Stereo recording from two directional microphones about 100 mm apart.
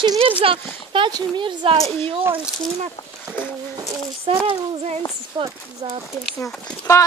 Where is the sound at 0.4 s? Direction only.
60° right (ahead or behind).